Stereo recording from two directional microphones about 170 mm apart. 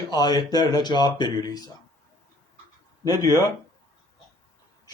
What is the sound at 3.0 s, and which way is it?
Speech, 20° left (ahead or behind).